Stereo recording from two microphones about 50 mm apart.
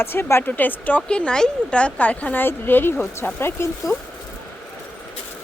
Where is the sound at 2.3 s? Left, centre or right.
Left.